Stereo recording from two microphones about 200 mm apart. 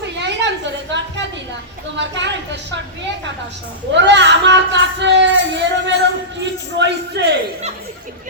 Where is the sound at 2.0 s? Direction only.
60° right (ahead or behind).